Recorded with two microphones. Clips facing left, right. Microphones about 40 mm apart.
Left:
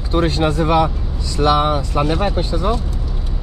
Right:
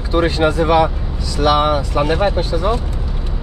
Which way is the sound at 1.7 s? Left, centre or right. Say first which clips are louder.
Right 2 dB; right.